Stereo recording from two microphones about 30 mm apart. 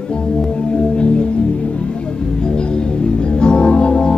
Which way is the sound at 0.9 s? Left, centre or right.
Left.